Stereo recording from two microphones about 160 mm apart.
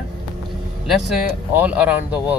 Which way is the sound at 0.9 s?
5° right (ahead or behind).